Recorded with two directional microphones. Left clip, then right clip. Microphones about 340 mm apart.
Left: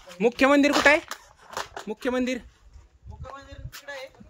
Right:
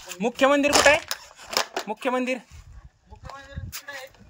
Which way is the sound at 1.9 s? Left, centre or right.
Centre.